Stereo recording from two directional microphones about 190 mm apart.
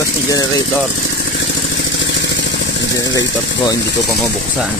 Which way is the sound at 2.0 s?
70° left (ahead or behind).